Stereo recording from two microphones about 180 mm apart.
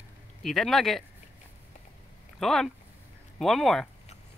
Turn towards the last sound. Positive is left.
turn(degrees=0)  # may be behind; listen again after turning